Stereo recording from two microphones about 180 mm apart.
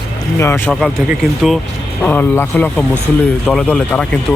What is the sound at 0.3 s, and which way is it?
Speech, 15° left (ahead or behind).